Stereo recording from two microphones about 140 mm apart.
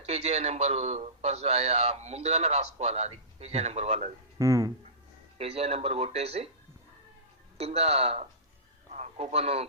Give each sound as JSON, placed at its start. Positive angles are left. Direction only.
{"t": 0.1, "sound": "a man's voice", "side_deg": -50}
{"t": 4.4, "sound": "speech", "side_deg": -25}
{"t": 5.4, "sound": "a man's voice", "side_deg": -45}
{"t": 7.6, "sound": "a man's voice", "side_deg": -45}
{"t": 8.9, "sound": "a sound", "side_deg": -55}